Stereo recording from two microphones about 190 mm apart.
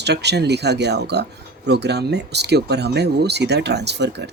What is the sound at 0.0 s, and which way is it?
Speech, 60° right (ahead or behind).